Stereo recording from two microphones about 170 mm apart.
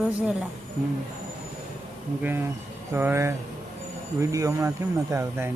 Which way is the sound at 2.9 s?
15° right (ahead or behind).